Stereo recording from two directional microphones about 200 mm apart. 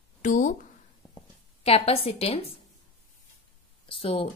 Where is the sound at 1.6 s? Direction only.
30° left (ahead or behind).